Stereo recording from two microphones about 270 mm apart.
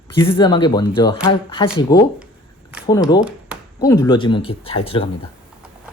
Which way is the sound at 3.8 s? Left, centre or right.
Centre.